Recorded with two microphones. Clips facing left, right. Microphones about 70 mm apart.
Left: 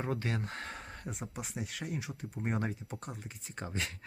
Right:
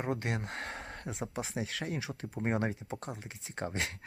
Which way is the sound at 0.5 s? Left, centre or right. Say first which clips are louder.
Right 2 dB; right.